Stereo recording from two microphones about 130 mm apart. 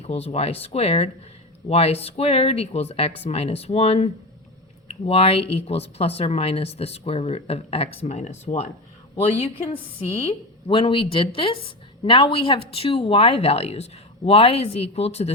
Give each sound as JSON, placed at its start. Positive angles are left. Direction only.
{"t": 0.0, "sound": "speech", "side_deg": 55}
{"t": 8.0, "sound": "speech", "side_deg": 60}
{"t": 10.1, "sound": "speech", "side_deg": 45}